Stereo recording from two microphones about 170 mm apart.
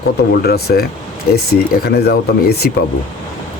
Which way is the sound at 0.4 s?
65° left (ahead or behind).